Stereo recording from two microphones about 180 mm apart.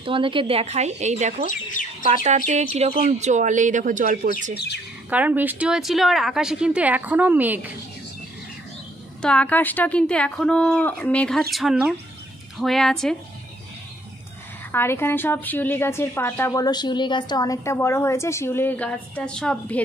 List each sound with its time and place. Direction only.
0.0 s speech: 30° right (ahead or behind)
1.4 s speech: 45° left (ahead or behind)
2.0 s speech: 40° right (ahead or behind)
5.1 s a woman's voice: 10° right (ahead or behind)
9.2 s a woman's voice: 5° left (ahead or behind)
14.7 s a woman's voice: 15° left (ahead or behind)